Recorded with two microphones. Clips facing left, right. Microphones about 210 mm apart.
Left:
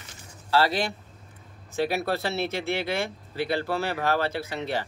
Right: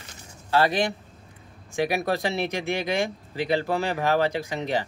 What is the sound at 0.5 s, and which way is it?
Speech, 20° right (ahead or behind).